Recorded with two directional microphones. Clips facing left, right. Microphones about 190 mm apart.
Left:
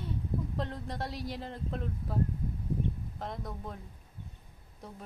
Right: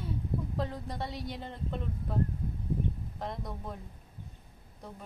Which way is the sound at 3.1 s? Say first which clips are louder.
Right 1 dB; centre (ahead or behind).